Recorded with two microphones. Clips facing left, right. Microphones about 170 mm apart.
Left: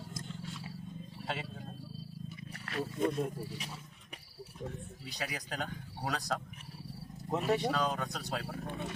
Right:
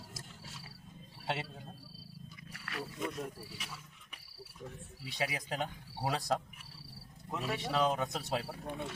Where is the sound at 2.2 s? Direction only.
30° left (ahead or behind).